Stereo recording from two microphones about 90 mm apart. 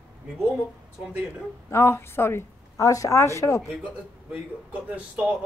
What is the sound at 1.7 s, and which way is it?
A woman's voice, 30° left (ahead or behind).